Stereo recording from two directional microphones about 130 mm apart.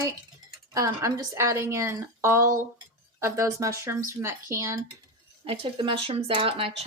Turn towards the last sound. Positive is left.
turn(degrees=-45)  # may be behind; listen again after turning